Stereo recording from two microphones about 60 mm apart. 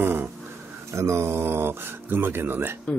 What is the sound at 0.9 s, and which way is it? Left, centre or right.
Speech, right.